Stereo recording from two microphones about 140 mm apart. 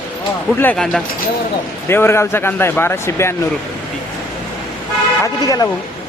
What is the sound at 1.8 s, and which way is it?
Speech, 15° left (ahead or behind).